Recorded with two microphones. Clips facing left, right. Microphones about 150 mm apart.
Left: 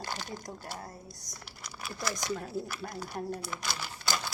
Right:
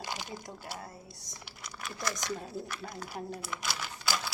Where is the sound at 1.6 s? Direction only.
5° left (ahead or behind).